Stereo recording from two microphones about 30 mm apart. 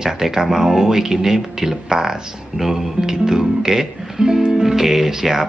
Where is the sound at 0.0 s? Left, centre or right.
Centre.